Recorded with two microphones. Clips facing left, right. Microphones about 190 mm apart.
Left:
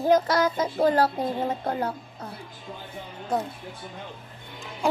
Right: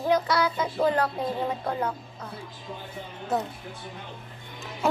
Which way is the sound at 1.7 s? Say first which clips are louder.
Left 1 dB; 35° left (ahead or behind).